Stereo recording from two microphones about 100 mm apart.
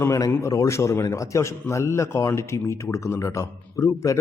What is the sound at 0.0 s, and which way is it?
A man's voice, 30° left (ahead or behind).